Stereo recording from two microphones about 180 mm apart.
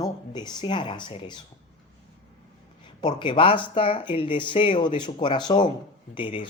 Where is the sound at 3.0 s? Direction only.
25° left (ahead or behind).